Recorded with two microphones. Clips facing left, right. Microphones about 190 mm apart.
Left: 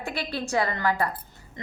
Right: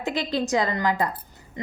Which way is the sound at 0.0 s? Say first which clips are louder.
Right 5 dB; 20° right (ahead or behind).